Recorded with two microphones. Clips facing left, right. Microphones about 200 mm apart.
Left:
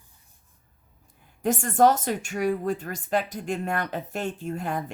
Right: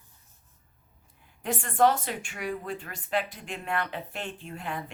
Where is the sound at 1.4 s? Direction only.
45° left (ahead or behind).